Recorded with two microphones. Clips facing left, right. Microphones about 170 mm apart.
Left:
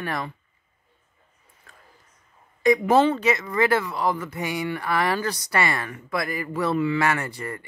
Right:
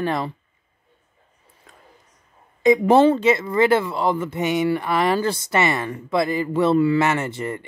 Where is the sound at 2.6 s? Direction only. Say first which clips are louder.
Right 4 dB; 25° right (ahead or behind).